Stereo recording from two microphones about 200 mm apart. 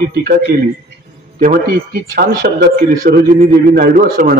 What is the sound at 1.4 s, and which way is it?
A man's voice, 45° right (ahead or behind).